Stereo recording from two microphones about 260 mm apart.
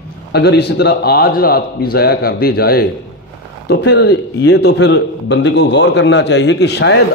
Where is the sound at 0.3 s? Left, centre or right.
Left.